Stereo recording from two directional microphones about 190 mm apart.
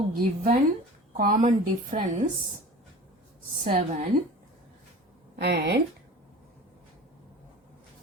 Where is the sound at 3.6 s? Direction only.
35° right (ahead or behind).